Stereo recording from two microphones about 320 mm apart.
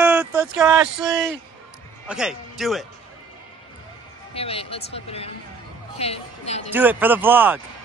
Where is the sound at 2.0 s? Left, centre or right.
Centre.